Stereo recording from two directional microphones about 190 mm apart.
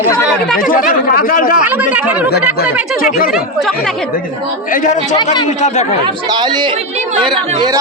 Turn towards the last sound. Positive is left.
turn(degrees=-20)  # may be behind; listen again after turning